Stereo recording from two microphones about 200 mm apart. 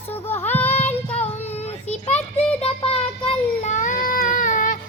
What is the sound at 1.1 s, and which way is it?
Child singing, 30° left (ahead or behind).